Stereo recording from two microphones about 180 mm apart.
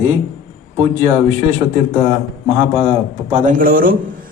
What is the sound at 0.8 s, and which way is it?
Speech, 40° right (ahead or behind).